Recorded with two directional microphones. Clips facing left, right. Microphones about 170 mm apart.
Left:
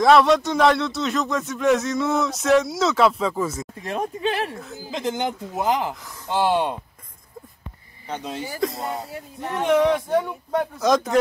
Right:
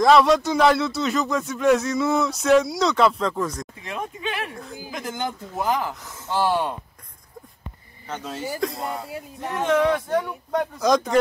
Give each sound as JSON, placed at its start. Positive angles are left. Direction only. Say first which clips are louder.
{"t": 0.0, "sound": "speech", "louder": "even", "side_deg": 0}
{"t": 3.8, "sound": "speech", "louder": "left 6 dB", "side_deg": 40}
{"t": 4.9, "sound": "speech", "louder": "left 5 dB", "side_deg": 20}
{"t": 8.3, "sound": "speech", "louder": "left 1 dB", "side_deg": 0}
{"t": 9.6, "sound": "speech", "louder": "left 2 dB", "side_deg": 15}